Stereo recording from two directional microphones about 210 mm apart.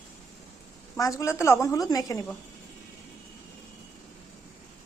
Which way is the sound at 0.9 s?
15° left (ahead or behind).